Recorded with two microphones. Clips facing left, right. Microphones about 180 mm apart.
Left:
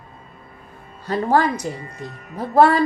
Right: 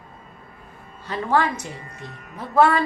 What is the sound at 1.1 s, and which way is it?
A woman's voice, 40° left (ahead or behind).